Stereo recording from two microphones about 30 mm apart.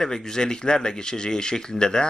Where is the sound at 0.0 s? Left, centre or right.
Left.